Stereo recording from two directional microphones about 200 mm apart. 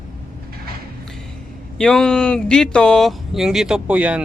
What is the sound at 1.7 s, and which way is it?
Speech, 5° left (ahead or behind).